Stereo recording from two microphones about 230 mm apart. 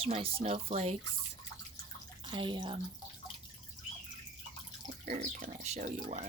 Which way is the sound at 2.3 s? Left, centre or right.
Centre.